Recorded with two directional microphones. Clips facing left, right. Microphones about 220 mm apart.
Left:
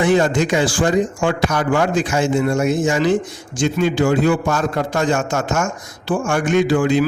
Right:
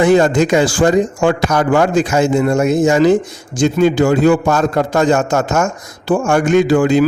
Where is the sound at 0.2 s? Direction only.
40° right (ahead or behind).